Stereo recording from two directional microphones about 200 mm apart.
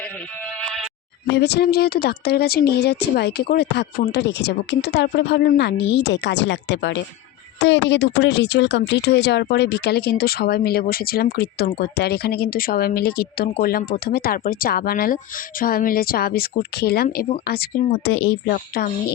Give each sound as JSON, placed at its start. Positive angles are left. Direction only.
{"t": 1.3, "sound": "speech", "side_deg": 55}
{"t": 18.0, "sound": "speech", "side_deg": 60}